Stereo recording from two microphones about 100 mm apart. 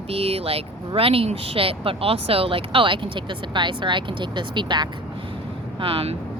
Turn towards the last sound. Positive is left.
turn(degrees=-75)  # may be behind; listen again after turning